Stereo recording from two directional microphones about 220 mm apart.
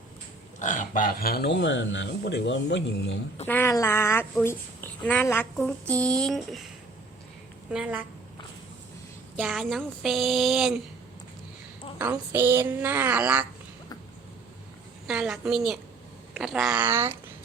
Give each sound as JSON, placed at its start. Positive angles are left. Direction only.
{"t": 0.6, "sound": "speech", "side_deg": 35}
{"t": 3.4, "sound": "a woman's voice", "side_deg": 10}
{"t": 7.7, "sound": "a woman's voice", "side_deg": -5}
{"t": 9.4, "sound": "a woman's voice", "side_deg": 0}
{"t": 11.9, "sound": "speech", "side_deg": -10}
{"t": 15.0, "sound": "a woman's voice", "side_deg": -5}